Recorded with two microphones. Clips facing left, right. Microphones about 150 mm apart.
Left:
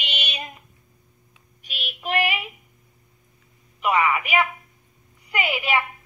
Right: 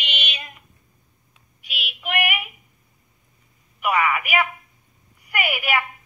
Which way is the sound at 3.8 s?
25° left (ahead or behind).